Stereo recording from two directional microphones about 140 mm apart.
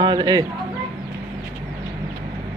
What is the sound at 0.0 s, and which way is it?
Speech, 30° right (ahead or behind).